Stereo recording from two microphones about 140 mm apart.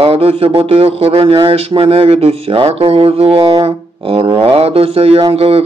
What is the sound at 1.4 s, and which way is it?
Speech, 45° right (ahead or behind).